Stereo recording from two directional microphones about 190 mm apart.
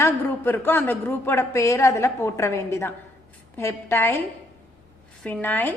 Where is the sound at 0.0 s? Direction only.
10° left (ahead or behind).